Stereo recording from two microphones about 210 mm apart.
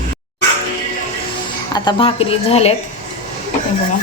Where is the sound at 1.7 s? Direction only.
25° left (ahead or behind).